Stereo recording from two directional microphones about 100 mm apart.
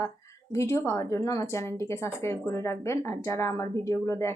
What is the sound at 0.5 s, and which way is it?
Speech, 30° left (ahead or behind).